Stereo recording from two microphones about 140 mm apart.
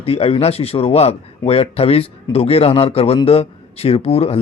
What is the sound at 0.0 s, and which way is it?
Speech, 45° left (ahead or behind).